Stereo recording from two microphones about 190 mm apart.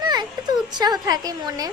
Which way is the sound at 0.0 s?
20° right (ahead or behind).